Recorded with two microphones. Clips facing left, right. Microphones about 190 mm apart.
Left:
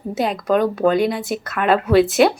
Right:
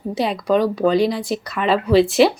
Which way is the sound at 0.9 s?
55° left (ahead or behind).